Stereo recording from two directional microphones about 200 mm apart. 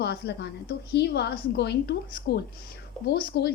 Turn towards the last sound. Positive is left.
turn(degrees=55)  # may be behind; listen again after turning